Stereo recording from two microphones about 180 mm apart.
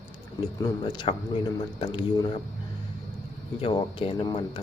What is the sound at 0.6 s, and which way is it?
Speech, 20° left (ahead or behind).